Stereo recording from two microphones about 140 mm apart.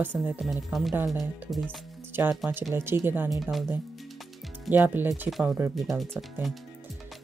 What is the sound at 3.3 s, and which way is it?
Speech, centre (ahead or behind).